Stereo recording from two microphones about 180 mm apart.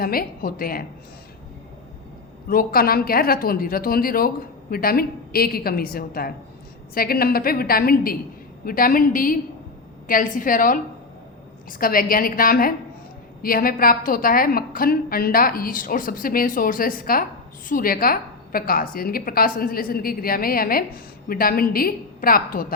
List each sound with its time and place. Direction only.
0.0 s a woman's voice: 55° left (ahead or behind)
2.5 s a woman's voice: 55° left (ahead or behind)